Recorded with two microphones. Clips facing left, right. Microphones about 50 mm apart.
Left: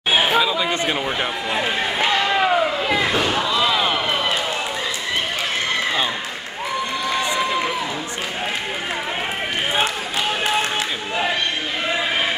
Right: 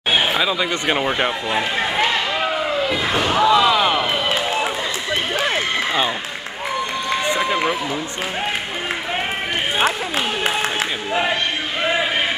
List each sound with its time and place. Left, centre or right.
0.1 s chatter: centre
0.4 s speech: centre
3.0 s slam: centre
3.3 s slam: centre
7.3 s run: centre